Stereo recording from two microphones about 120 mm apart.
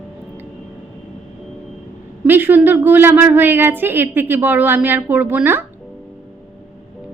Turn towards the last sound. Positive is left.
turn(degrees=-15)  # may be behind; listen again after turning